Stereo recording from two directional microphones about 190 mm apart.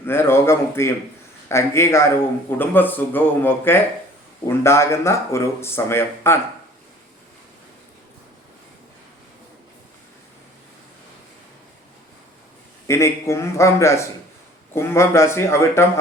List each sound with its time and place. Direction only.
0.0 s a man's voice: 10° left (ahead or behind)
12.9 s a man's voice: 15° left (ahead or behind)